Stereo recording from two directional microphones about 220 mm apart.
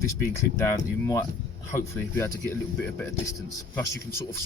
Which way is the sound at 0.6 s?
15° left (ahead or behind).